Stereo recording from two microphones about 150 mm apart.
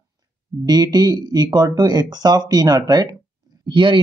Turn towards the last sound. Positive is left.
turn(degrees=-35)  # may be behind; listen again after turning